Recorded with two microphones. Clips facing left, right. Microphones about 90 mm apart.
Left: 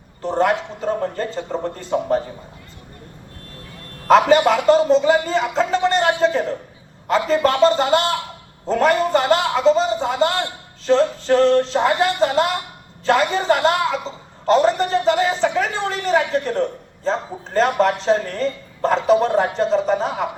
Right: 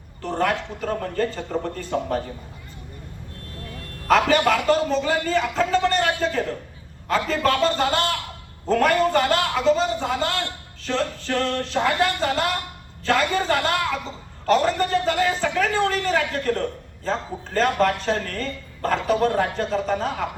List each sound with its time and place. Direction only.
0.2 s a man's voice: 25° left (ahead or behind)
4.1 s a man's voice: 25° left (ahead or behind)